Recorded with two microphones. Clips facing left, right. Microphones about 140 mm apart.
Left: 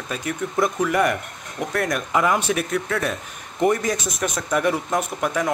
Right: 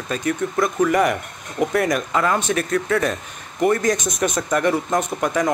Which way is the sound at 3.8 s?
5° left (ahead or behind).